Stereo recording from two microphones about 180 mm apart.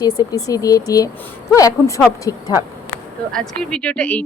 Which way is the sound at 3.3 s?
5° left (ahead or behind).